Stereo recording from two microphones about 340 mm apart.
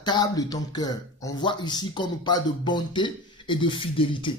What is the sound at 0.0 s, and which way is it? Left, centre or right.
Speech, centre.